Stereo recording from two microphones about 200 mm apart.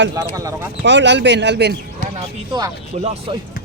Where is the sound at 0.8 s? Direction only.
65° right (ahead or behind).